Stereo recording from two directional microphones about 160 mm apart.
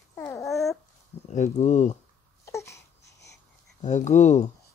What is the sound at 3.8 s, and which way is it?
Speech, 50° left (ahead or behind).